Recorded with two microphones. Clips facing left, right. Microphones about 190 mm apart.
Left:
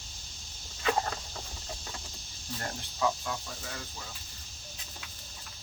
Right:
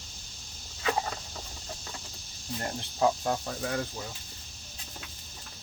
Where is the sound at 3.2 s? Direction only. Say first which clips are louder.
Right 8 dB; 60° right (ahead or behind).